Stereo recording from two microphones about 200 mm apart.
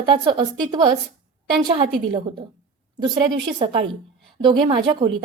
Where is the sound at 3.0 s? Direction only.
25° right (ahead or behind).